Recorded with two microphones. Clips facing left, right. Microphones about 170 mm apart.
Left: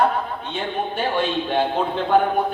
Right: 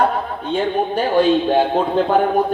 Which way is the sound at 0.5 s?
40° right (ahead or behind).